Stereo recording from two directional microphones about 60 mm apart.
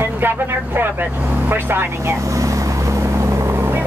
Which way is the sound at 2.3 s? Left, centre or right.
Right.